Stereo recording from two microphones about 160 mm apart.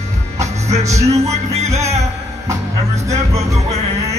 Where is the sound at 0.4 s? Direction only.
45° right (ahead or behind).